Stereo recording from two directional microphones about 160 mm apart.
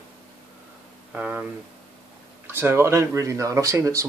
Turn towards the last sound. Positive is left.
turn(degrees=-20)  # may be behind; listen again after turning